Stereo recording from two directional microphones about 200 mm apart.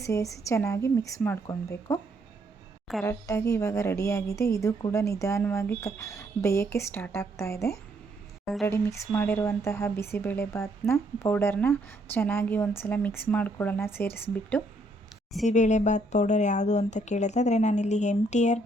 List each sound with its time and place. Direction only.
0.0 s a woman's voice: 15° left (ahead or behind)
3.0 s a woman's voice: 15° left (ahead or behind)
15.4 s speech: 35° left (ahead or behind)